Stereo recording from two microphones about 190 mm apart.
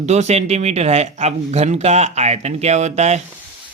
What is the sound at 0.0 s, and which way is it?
Speech, 35° right (ahead or behind).